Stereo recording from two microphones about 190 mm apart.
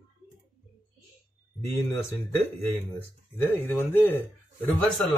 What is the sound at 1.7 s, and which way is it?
A man's voice, 15° left (ahead or behind).